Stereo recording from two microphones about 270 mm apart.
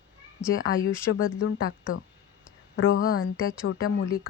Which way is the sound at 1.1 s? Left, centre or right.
Left.